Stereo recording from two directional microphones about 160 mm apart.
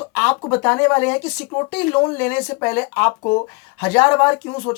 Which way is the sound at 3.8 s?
15° left (ahead or behind).